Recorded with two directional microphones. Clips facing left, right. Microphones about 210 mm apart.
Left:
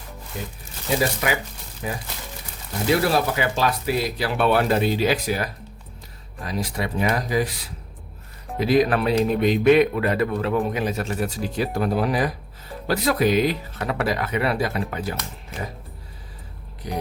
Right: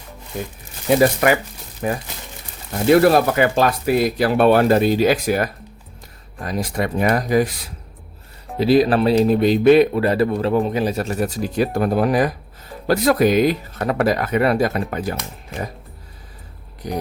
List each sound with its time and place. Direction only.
0.9 s speech: 55° right (ahead or behind)
8.5 s speech: 30° right (ahead or behind); by 15.1 s 45° right (ahead or behind)
16.8 s speech: 45° right (ahead or behind)